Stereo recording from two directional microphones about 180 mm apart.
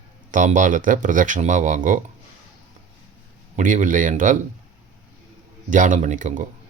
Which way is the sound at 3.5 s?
45° right (ahead or behind).